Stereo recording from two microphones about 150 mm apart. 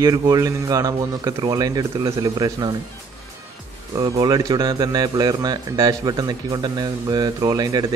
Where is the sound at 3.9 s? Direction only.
25° right (ahead or behind).